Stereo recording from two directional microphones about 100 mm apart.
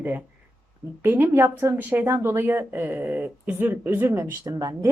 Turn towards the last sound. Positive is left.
turn(degrees=-35)  # may be behind; listen again after turning